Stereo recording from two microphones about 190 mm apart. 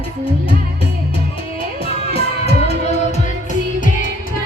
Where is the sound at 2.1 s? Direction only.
30° left (ahead or behind).